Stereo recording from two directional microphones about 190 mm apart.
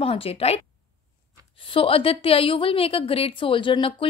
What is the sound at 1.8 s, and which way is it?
A woman's voice, 30° left (ahead or behind).